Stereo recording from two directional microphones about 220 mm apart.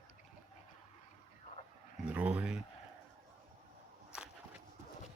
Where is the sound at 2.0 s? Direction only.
5° right (ahead or behind).